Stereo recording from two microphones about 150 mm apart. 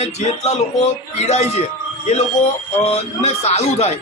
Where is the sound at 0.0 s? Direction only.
45° left (ahead or behind).